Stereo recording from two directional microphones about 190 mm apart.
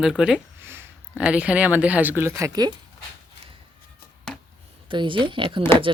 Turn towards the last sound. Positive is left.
turn(degrees=-25)  # may be behind; listen again after turning